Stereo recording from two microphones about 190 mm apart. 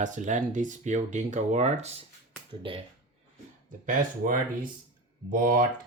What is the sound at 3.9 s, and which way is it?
Speech, 45° right (ahead or behind).